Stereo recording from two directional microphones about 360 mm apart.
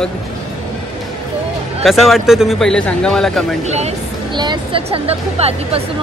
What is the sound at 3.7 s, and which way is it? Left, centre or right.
Speech, centre.